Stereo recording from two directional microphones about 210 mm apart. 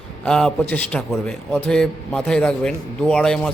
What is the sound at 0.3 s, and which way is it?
A man's voice, 5° left (ahead or behind).